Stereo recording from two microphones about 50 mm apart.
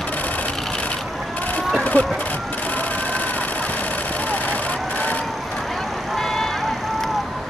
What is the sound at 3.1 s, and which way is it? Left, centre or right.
Vehicle, left.